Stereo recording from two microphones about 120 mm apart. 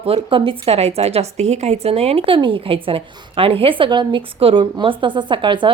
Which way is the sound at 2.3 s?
45° right (ahead or behind).